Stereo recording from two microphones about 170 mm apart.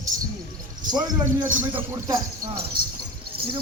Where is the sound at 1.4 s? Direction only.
10° right (ahead or behind).